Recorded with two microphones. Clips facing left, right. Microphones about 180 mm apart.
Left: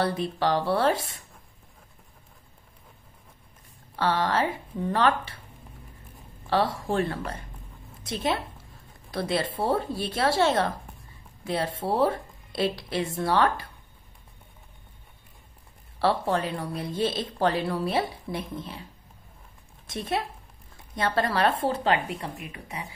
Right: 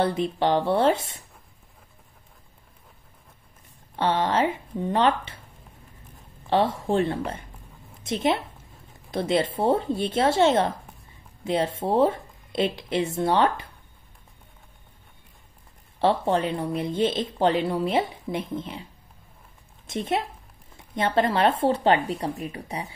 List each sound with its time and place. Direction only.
0.0 s speech: 20° right (ahead or behind)
3.9 s speech: 20° right (ahead or behind)
6.5 s speech: 20° right (ahead or behind)
16.0 s speech: 20° right (ahead or behind)
19.9 s speech: 25° right (ahead or behind)